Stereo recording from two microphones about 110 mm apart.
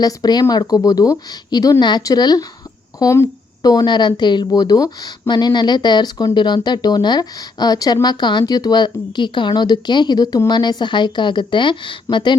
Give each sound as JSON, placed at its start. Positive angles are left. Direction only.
{"t": 0.0, "sound": "a woman's voice", "side_deg": 35}